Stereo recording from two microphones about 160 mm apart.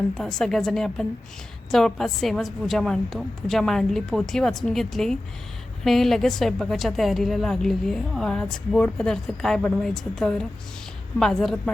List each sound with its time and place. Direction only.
0.1 s a woman's voice: 5° left (ahead or behind)